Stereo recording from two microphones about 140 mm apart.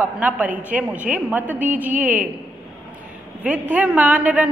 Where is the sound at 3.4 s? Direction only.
10° right (ahead or behind).